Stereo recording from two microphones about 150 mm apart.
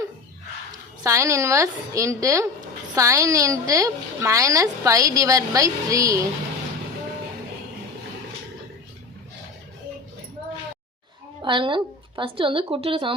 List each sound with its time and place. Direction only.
1.0 s a woman's voice: 20° right (ahead or behind)
11.4 s a woman's voice: 35° right (ahead or behind)